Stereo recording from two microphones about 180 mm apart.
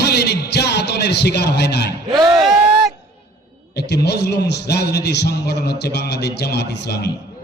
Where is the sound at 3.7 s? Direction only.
65° left (ahead or behind).